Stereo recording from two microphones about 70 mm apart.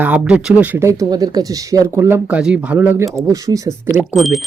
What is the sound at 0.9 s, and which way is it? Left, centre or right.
Speech, right.